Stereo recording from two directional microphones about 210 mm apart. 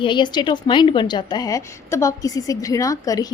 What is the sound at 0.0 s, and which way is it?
A woman's voice, 20° left (ahead or behind).